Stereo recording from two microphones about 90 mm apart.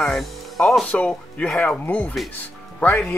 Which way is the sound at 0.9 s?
15° left (ahead or behind).